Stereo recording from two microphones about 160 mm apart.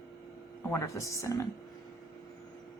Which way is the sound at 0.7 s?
20° left (ahead or behind).